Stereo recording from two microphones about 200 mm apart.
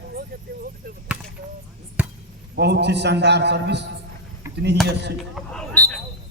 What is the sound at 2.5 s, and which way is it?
A man's voice, 55° right (ahead or behind).